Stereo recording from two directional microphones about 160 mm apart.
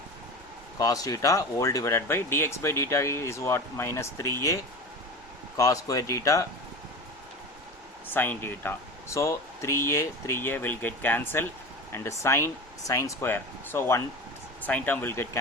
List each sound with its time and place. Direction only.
0.8 s speech: 20° left (ahead or behind)
8.1 s speech: 10° left (ahead or behind)